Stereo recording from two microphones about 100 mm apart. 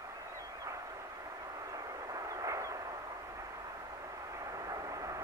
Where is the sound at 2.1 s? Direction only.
35° right (ahead or behind).